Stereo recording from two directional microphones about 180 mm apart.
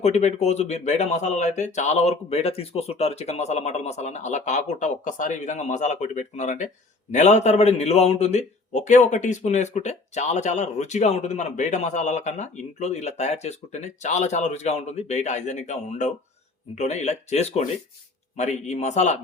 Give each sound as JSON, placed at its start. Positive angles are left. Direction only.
{"t": 0.0, "sound": "a man's voice", "side_deg": 40}